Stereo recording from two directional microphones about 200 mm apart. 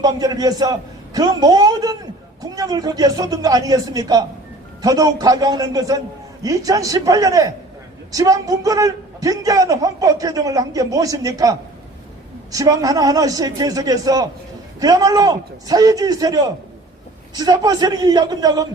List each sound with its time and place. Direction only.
0.0 s a man's voice: 20° right (ahead or behind)